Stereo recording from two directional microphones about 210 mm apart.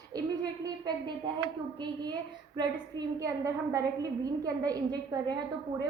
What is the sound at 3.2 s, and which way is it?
A woman's voice, 15° right (ahead or behind).